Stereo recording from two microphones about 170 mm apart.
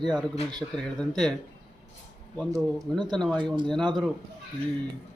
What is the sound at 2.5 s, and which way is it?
Speech, 25° right (ahead or behind).